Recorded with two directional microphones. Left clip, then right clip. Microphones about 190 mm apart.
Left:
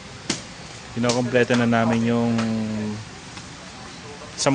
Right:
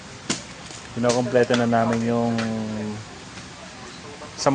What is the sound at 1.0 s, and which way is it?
Speech, 20° left (ahead or behind).